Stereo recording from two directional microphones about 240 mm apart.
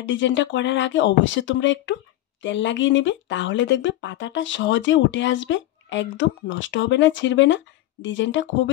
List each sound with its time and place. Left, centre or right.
0.0 s speech: left